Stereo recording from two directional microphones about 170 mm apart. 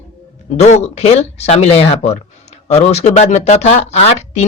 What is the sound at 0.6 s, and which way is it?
Speech, 40° left (ahead or behind).